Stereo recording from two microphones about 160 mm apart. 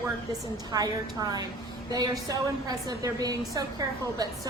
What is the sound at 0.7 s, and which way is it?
A woman's voice, 25° right (ahead or behind).